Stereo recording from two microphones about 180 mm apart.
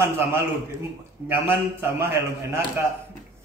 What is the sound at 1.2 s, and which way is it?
Speech, 10° right (ahead or behind).